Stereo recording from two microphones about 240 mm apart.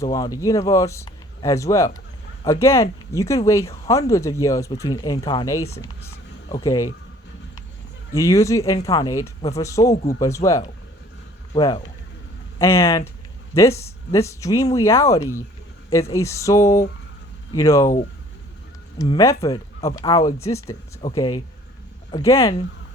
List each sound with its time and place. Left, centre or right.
0.0 s speech: centre
6.1 s a sound: centre
8.1 s speech: centre
18.9 s speech: centre